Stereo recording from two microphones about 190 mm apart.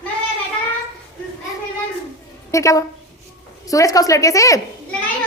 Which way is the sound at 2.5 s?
15° left (ahead or behind).